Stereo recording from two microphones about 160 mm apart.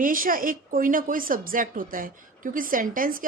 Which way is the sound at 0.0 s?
60° right (ahead or behind).